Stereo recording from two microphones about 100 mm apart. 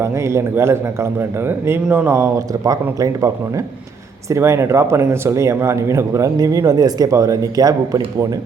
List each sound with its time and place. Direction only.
0.0 s speech: 30° right (ahead or behind)
2.5 s speech: 40° right (ahead or behind)